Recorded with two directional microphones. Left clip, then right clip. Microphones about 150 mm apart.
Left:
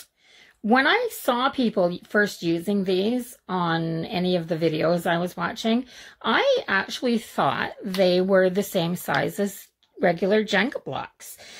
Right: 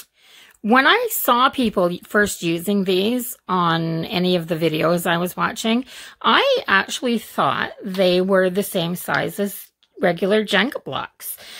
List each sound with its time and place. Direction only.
0.7 s speech: 30° right (ahead or behind)